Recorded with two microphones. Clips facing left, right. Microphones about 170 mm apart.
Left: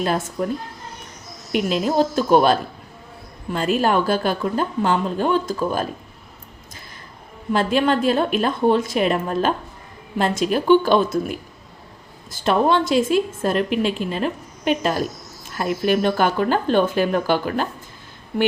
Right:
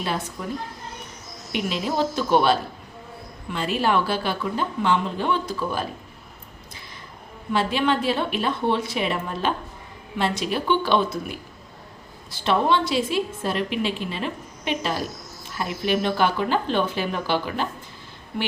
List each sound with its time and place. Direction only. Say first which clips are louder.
0.0 s a woman's voice: left 6 dB; 45° left (ahead or behind)
1.7 s a woman's voice: left 5 dB; 45° left (ahead or behind)
7.5 s a woman's voice: left 4 dB; 45° left (ahead or behind)
12.3 s a woman's voice: left 3 dB; 45° left (ahead or behind)